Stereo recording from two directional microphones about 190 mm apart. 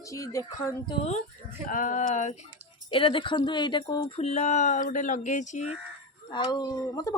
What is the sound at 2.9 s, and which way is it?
Speech, 25° left (ahead or behind).